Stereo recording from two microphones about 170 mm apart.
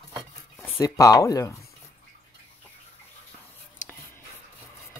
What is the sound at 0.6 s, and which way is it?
Speech, 15° left (ahead or behind).